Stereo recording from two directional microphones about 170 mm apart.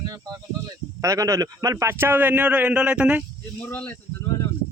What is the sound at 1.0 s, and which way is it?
A man's voice, 20° right (ahead or behind).